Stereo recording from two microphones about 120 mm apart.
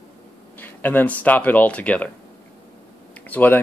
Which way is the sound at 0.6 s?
15° left (ahead or behind).